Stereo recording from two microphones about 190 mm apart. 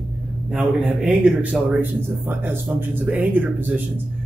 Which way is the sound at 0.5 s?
5° right (ahead or behind).